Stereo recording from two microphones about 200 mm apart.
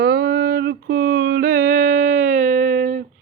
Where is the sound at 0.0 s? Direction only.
50° right (ahead or behind).